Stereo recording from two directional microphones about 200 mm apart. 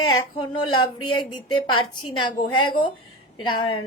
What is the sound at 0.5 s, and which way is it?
A woman's voice, 25° left (ahead or behind).